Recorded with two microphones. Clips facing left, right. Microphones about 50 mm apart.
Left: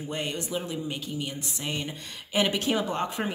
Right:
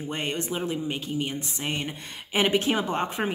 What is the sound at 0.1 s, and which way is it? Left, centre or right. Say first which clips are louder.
Speech: right 1 dB; right.